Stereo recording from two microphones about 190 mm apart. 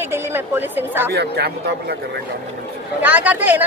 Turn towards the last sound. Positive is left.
turn(degrees=-10)  # may be behind; listen again after turning